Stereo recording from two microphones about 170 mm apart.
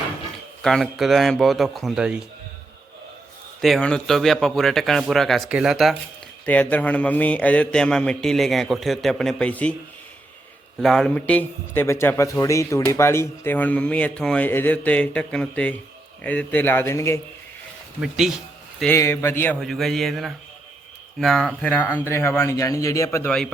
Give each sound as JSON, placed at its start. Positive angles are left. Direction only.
{"t": 0.6, "sound": "a man's voice", "side_deg": 0}
{"t": 3.6, "sound": "a man's voice", "side_deg": 5}
{"t": 10.8, "sound": "a man's voice", "side_deg": 5}
{"t": 18.0, "sound": "a man's voice", "side_deg": -5}
{"t": 18.9, "sound": "a man's voice", "side_deg": 15}
{"t": 19.5, "sound": "a man's voice", "side_deg": 0}